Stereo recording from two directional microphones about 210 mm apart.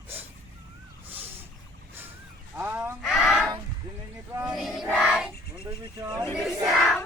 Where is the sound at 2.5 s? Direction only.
10° right (ahead or behind).